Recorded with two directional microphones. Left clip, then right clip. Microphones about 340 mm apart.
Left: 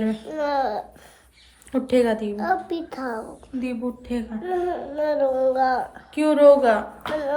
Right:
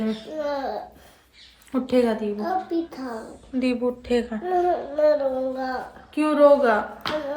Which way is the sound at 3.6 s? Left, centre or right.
Right.